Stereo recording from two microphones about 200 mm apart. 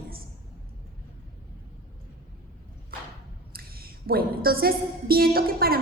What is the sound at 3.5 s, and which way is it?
A woman's voice, 50° right (ahead or behind).